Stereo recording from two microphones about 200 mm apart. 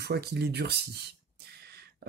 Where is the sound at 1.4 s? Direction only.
50° right (ahead or behind).